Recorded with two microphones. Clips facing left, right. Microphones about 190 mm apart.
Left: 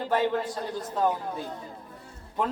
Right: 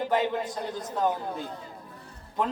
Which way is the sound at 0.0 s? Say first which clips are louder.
Left 1 dB; 15° right (ahead or behind).